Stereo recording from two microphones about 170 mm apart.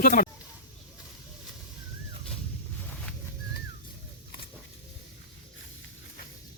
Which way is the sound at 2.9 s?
5° left (ahead or behind).